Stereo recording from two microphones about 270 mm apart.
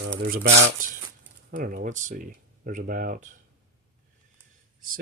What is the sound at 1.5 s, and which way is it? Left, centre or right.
Speech, right.